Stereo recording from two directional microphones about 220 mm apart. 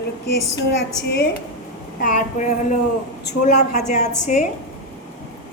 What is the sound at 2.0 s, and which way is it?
A woman's voice, 35° left (ahead or behind).